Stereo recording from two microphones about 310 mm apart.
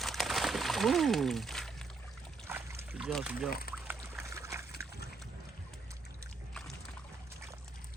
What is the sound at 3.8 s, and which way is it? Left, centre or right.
Trickle, centre.